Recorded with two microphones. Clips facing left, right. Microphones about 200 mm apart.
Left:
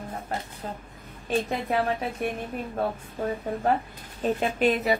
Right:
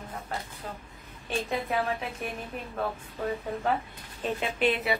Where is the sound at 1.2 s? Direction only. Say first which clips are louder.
Left 4 dB; 40° left (ahead or behind).